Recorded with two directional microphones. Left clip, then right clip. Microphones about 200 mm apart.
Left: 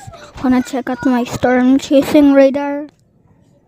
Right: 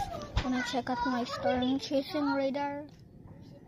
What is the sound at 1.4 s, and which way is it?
Speech, 60° left (ahead or behind).